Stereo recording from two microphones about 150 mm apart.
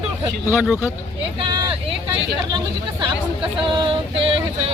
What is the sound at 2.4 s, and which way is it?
Speech, 30° right (ahead or behind).